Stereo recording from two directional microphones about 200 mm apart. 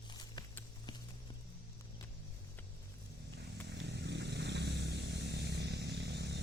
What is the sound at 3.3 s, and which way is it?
Vehicle, 60° right (ahead or behind).